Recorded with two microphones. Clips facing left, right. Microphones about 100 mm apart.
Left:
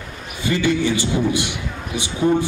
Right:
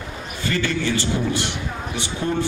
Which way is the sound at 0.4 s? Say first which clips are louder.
Left 5 dB; 15° left (ahead or behind).